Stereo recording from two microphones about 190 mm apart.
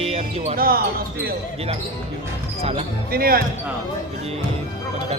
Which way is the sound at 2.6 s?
30° right (ahead or behind).